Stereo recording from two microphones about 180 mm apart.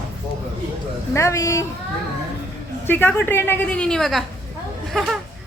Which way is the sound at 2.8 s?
10° left (ahead or behind).